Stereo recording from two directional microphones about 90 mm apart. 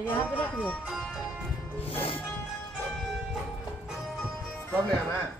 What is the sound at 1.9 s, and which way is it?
Music, 90° left.